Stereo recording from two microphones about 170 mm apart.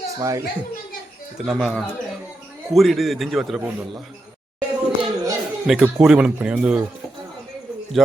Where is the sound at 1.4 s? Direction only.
Centre (ahead or behind).